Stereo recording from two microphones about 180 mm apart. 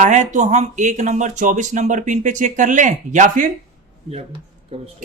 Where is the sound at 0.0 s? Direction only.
40° right (ahead or behind).